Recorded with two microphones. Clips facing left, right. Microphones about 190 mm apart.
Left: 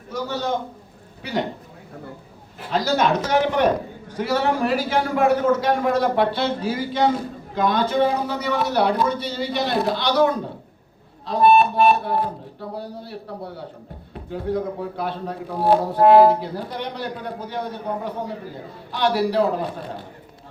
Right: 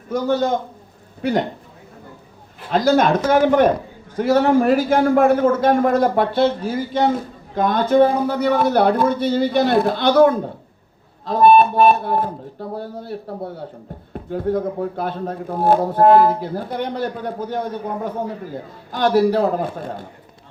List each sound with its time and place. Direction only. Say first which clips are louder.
0.1 s a man's voice: right 6 dB; 50° right (ahead or behind)
2.7 s a man's voice: right 5 dB; 50° right (ahead or behind)